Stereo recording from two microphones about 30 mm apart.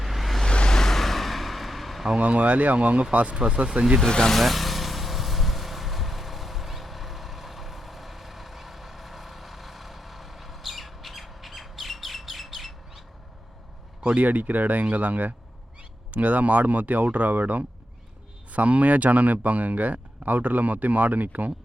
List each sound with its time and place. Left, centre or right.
0.0 s vehicle: centre
0.7 s vehicle: centre
2.2 s speech: right
3.4 s speech: right
4.3 s vehicle: centre
14.2 s speech: right